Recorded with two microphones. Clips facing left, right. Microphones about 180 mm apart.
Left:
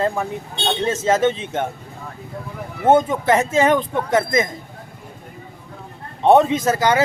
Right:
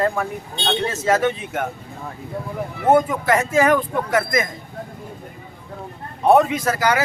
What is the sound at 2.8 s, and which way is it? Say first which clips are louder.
Speech: left 1 dB; 25° left (ahead or behind).